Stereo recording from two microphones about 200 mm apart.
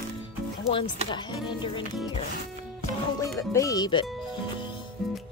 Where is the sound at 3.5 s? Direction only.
15° left (ahead or behind).